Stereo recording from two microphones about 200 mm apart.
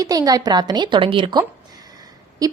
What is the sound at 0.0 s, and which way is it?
A woman's voice, 20° right (ahead or behind).